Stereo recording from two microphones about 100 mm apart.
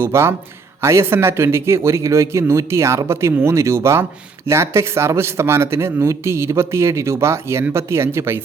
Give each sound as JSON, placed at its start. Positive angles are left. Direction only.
{"t": 0.0, "sound": "speech", "side_deg": -25}